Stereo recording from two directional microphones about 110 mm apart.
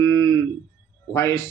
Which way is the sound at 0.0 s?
30° left (ahead or behind).